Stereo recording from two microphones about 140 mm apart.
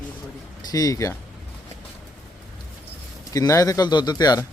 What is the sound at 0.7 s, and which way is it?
Speech, 25° left (ahead or behind).